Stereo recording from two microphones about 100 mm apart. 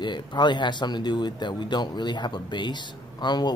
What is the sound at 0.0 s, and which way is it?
Speech, 50° left (ahead or behind).